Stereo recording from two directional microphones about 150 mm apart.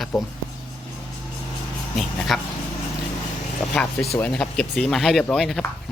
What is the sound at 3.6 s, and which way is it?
Speech, 15° left (ahead or behind).